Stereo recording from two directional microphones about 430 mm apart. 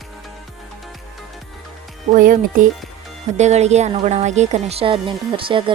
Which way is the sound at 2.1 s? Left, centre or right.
Centre.